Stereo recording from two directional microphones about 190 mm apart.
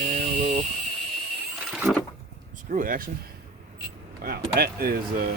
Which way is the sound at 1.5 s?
5° right (ahead or behind).